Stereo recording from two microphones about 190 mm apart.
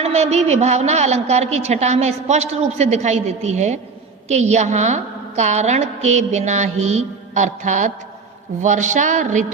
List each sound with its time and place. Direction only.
0.0 s a woman's voice: 35° right (ahead or behind)